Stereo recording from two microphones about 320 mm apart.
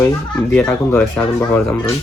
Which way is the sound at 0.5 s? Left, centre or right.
Centre.